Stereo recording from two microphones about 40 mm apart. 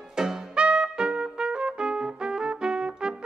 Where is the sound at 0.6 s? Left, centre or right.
Right.